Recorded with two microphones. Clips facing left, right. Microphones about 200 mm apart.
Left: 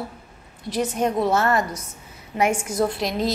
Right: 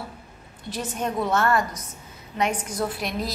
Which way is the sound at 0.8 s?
20° left (ahead or behind).